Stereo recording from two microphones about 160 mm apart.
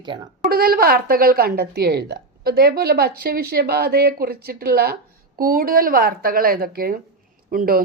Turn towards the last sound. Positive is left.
turn(degrees=-65)  # may be behind; listen again after turning